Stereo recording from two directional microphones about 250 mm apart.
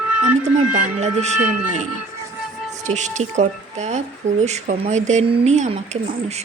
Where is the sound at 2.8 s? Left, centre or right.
Right.